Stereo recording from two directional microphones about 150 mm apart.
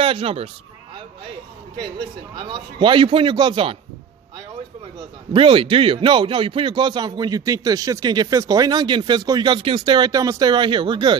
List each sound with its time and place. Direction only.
0.0 s speech: 40° right (ahead or behind)
2.3 s a man's voice: 35° right (ahead or behind)
5.3 s a man's voice: 35° right (ahead or behind)